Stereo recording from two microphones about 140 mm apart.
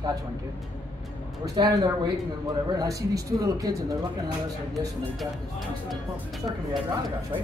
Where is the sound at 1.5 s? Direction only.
30° right (ahead or behind).